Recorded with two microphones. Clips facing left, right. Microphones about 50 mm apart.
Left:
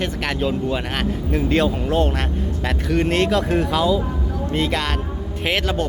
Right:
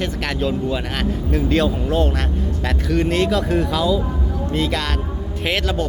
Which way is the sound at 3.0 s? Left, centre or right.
Left.